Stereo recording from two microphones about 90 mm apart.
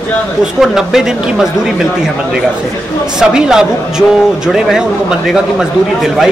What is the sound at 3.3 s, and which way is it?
A man's voice, 5° right (ahead or behind).